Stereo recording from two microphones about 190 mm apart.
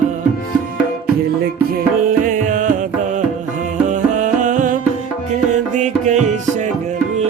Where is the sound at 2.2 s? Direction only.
45° right (ahead or behind).